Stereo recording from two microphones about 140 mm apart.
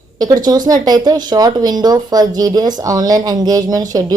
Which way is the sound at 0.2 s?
30° right (ahead or behind).